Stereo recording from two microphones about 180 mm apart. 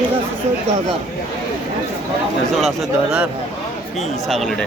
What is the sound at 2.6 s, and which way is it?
Speech, centre (ahead or behind).